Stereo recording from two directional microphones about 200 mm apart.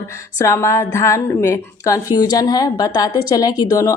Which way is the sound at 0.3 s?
15° left (ahead or behind).